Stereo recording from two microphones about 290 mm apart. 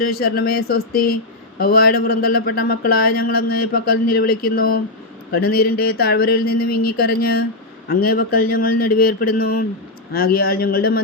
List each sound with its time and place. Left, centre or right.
0.0 s speech: left